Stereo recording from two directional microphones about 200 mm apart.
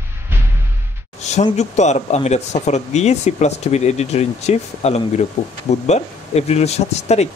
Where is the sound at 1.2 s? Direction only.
35° left (ahead or behind).